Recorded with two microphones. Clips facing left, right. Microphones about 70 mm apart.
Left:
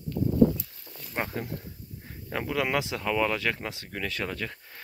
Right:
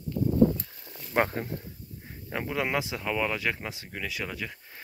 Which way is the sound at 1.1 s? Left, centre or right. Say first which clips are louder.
Right 7 dB; right.